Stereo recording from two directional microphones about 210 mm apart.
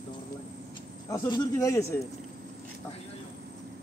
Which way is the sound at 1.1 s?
15° left (ahead or behind).